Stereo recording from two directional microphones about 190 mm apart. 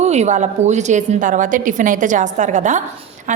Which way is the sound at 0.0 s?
35° right (ahead or behind).